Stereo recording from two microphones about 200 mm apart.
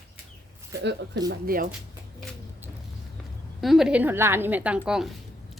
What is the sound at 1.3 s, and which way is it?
Speech, 45° right (ahead or behind).